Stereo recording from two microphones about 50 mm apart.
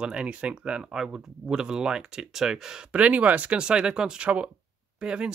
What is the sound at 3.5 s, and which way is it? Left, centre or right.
Speech, centre.